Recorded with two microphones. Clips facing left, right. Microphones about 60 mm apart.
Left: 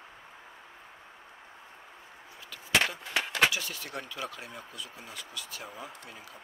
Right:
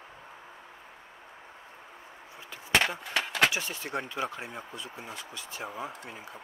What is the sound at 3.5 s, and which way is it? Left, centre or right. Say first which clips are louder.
Speech: right 3 dB; right.